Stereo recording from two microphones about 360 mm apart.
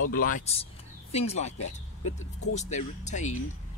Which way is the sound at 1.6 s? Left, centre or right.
Left.